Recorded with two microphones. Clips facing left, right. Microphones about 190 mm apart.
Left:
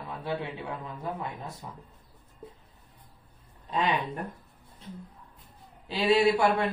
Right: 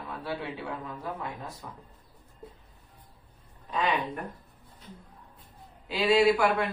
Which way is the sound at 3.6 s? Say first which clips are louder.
Even; 30° left (ahead or behind).